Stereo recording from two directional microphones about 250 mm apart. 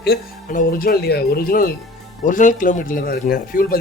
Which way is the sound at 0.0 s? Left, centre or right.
Left.